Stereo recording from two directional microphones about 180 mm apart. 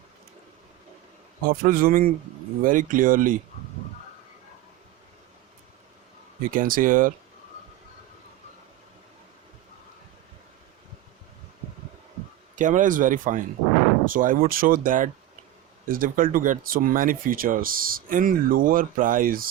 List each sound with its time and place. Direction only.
1.5 s speech: 55° right (ahead or behind)
6.5 s speech: 50° right (ahead or behind)
12.5 s speech: 45° right (ahead or behind)